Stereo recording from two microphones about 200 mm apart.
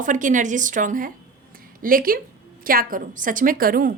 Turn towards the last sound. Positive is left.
turn(degrees=-45)  # may be behind; listen again after turning